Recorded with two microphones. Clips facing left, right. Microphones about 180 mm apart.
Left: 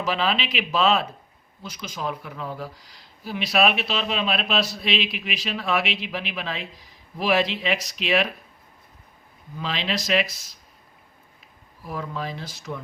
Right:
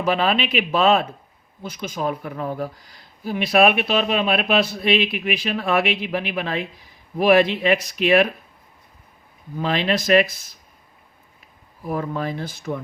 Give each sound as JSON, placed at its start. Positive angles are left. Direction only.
{"t": 0.0, "sound": "speech", "side_deg": -55}
{"t": 9.6, "sound": "speech", "side_deg": -55}
{"t": 11.9, "sound": "speech", "side_deg": -55}